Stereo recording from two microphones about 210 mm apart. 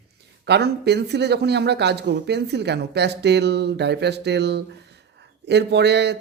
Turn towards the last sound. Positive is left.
turn(degrees=-55)  # may be behind; listen again after turning